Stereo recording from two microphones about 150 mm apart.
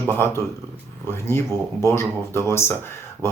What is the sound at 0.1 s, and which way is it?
Speech, 15° left (ahead or behind).